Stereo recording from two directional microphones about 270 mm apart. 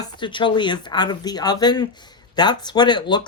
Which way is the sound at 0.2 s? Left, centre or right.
Centre.